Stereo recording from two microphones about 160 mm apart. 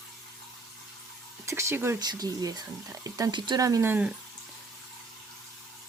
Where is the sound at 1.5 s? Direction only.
15° right (ahead or behind).